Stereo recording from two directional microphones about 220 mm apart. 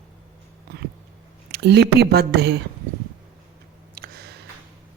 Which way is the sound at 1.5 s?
50° right (ahead or behind).